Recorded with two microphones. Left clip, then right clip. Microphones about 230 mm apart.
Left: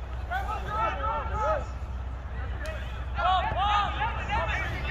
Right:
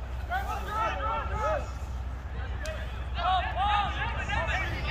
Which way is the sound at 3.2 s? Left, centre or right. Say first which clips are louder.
Left 3 dB; left.